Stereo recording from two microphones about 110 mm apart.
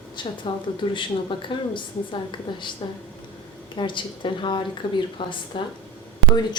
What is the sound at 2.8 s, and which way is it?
Speech, 55° left (ahead or behind).